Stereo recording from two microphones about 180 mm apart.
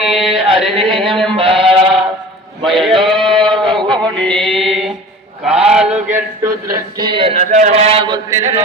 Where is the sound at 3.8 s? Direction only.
25° right (ahead or behind).